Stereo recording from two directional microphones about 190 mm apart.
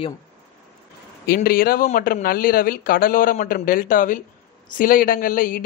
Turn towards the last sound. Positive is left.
turn(degrees=45)  # may be behind; listen again after turning